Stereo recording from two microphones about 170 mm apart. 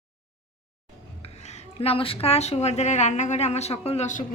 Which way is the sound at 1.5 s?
35° left (ahead or behind).